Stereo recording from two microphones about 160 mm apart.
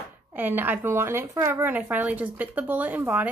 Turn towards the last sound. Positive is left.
turn(degrees=-10)  # may be behind; listen again after turning